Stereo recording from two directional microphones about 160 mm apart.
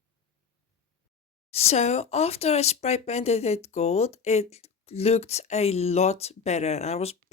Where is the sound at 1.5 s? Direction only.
40° left (ahead or behind).